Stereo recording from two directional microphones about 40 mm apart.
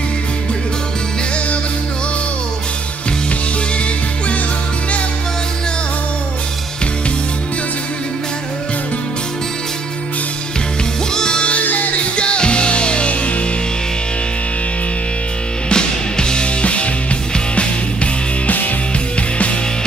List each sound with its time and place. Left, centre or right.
11.1 s music: left
11.5 s music: left
12.0 s music: left
15.7 s music: left
19.1 s music: left